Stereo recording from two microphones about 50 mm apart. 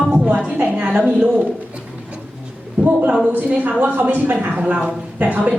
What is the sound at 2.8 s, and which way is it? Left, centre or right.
Speech, right.